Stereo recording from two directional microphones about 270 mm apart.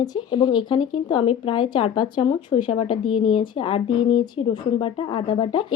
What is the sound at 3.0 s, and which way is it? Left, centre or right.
Speech, left.